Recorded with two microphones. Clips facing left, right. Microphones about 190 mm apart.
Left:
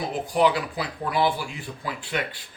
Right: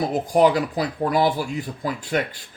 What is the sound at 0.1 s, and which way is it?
Speech, 45° right (ahead or behind).